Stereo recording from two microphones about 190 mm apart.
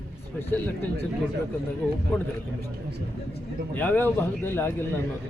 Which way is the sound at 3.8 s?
10° left (ahead or behind).